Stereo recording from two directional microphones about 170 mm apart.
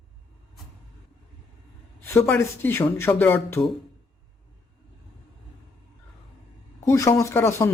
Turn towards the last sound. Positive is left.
turn(degrees=15)  # may be behind; listen again after turning